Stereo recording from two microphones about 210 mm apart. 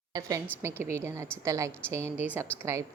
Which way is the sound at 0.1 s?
15° right (ahead or behind).